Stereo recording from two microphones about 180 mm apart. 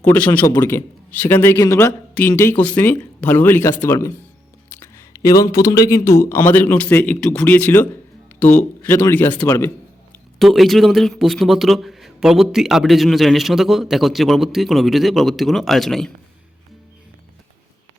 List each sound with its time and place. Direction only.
0.1 s a man's voice: 10° left (ahead or behind)
4.7 s a sound: 15° left (ahead or behind)
5.5 s a man's voice: 20° left (ahead or behind)
10.3 s a man's voice: centre (ahead or behind)